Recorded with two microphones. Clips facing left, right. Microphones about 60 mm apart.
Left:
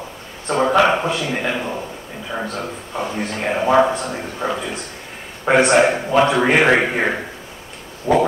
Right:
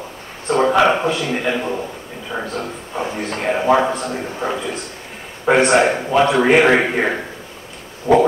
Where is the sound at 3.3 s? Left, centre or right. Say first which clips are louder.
Right 2 dB; centre.